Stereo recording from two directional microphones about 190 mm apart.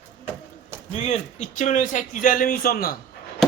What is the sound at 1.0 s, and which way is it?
A man's voice, 35° left (ahead or behind).